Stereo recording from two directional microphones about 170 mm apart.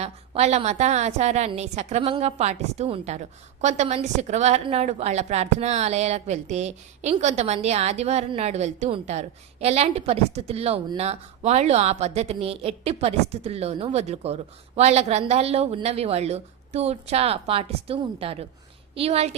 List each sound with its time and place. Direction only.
0.0 s a woman's voice: 40° right (ahead or behind)